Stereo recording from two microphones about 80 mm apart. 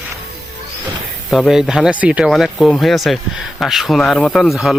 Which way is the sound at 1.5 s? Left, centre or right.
Centre.